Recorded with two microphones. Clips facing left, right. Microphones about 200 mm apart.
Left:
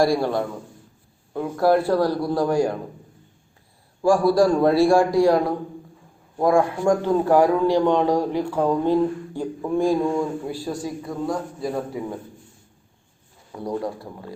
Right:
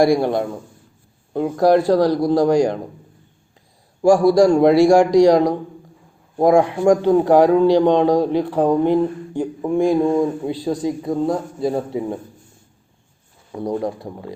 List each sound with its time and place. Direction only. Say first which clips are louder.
0.0 s a man's voice: right 4 dB; 15° right (ahead or behind)
1.3 s speech: right 6 dB; 30° right (ahead or behind)
2.0 s a man's voice: right 6 dB; 15° right (ahead or behind)
4.2 s a man's voice: right 4 dB; 15° right (ahead or behind)
4.8 s a man's voice: right 5 dB; 80° right
6.4 s a man's voice: right 5 dB; 20° right (ahead or behind)
13.5 s a man's voice: right 4 dB; 25° right (ahead or behind)